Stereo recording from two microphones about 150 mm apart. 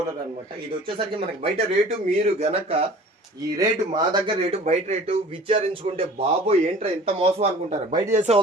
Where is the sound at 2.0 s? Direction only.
50° right (ahead or behind).